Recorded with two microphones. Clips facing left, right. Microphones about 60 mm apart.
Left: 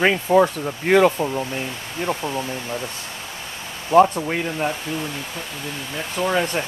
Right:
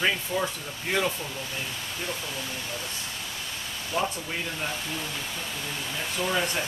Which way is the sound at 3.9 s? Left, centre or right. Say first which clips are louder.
Left 15 dB; left.